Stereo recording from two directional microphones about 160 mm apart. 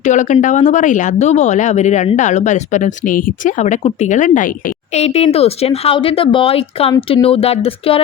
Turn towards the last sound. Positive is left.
turn(degrees=40)  # may be behind; listen again after turning